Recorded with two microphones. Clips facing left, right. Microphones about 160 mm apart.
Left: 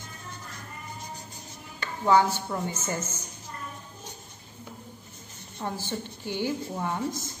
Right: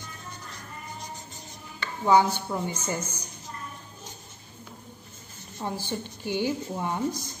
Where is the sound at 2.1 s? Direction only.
15° right (ahead or behind).